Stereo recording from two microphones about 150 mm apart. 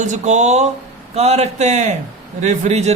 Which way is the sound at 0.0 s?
55° right (ahead or behind).